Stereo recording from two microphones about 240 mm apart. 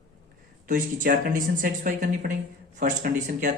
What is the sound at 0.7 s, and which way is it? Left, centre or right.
A man's voice, right.